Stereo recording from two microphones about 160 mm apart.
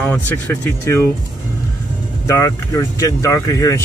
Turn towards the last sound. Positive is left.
turn(degrees=20)  # may be behind; listen again after turning